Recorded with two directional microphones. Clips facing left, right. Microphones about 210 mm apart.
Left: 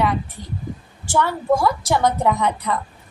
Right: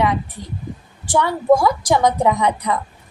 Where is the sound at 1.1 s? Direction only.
15° right (ahead or behind).